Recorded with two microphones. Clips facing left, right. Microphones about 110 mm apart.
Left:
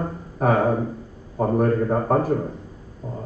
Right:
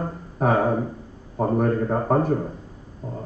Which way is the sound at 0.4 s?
5° left (ahead or behind).